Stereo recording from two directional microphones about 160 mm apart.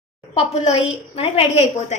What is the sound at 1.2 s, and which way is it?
Speech, 40° left (ahead or behind).